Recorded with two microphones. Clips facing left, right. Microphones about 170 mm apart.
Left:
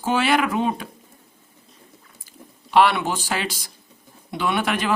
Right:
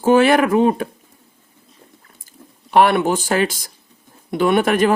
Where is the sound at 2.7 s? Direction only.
50° right (ahead or behind).